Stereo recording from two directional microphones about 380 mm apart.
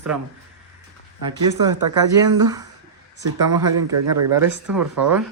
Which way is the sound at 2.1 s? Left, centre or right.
Centre.